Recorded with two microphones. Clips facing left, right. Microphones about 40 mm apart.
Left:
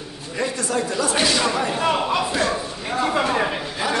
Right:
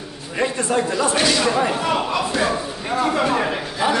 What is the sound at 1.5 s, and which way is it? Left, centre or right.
Speech, centre.